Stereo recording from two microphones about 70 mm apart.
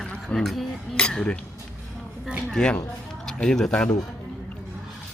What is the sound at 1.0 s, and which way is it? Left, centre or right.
Speech, centre.